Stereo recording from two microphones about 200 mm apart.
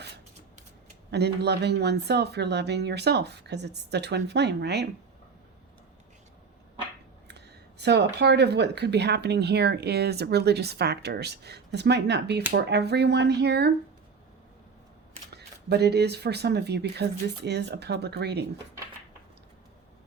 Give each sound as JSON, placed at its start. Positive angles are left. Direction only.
{"t": 1.1, "sound": "speech", "side_deg": -55}
{"t": 7.3, "sound": "speech", "side_deg": -55}
{"t": 15.3, "sound": "speech", "side_deg": -55}